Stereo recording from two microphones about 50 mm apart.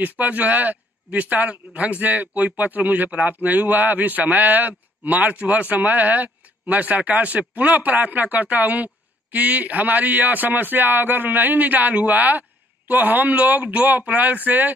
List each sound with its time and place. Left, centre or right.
0.0 s a man's voice: right